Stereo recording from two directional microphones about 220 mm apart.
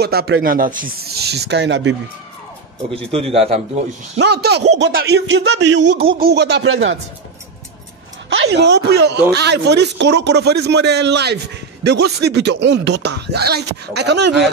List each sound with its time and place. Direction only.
0.0 s speech: 45° right (ahead or behind)
2.9 s a man's voice: 25° right (ahead or behind)
4.2 s speech: 50° right (ahead or behind)
6.6 s speech: 65° right (ahead or behind)
8.3 s speech: 55° right (ahead or behind)